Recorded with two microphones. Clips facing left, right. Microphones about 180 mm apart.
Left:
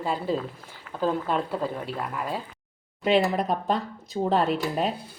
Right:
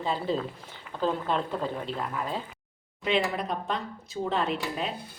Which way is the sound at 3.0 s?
45° left (ahead or behind).